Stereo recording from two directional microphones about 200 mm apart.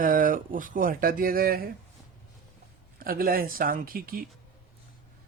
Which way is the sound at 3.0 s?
45° right (ahead or behind).